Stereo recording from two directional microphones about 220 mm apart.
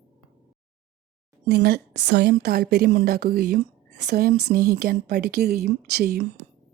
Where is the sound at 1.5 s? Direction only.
45° right (ahead or behind).